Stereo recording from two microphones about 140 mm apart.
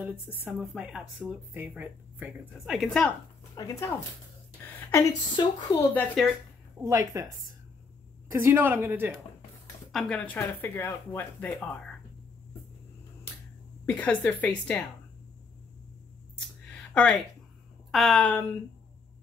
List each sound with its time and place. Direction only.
0.3 s speech: 10° right (ahead or behind)
2.7 s speech: centre (ahead or behind)
3.5 s speech: 20° left (ahead or behind)
4.6 s a sound: 20° left (ahead or behind)
5.3 s a woman's voice: 30° left (ahead or behind)
5.9 s speech: centre (ahead or behind)
6.8 s speech: 25° right (ahead or behind)
8.3 s speech: 20° right (ahead or behind)
9.9 s speech: 5° left (ahead or behind)
13.8 s speech: 10° left (ahead or behind)
16.9 s speech: 5° left (ahead or behind)